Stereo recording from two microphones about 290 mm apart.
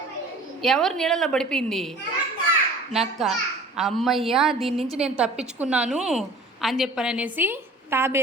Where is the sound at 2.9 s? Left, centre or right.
Centre.